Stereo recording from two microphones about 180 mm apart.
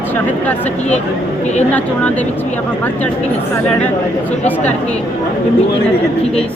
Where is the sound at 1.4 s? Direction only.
40° left (ahead or behind).